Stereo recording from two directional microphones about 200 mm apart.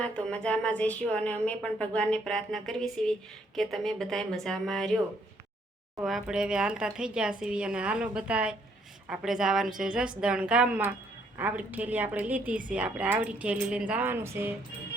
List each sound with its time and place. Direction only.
0.0 s a woman's voice: 5° left (ahead or behind)
6.1 s a woman's voice: 5° right (ahead or behind)